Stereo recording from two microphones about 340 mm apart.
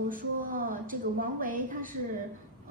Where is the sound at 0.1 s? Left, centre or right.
Right.